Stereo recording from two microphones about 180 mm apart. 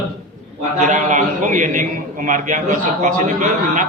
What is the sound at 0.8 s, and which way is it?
A man's voice, 45° right (ahead or behind).